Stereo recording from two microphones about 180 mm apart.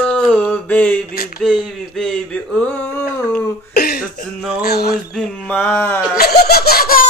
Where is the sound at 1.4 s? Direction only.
Centre (ahead or behind).